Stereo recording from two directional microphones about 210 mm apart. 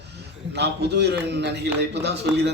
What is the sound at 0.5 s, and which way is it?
A man's voice, 50° right (ahead or behind).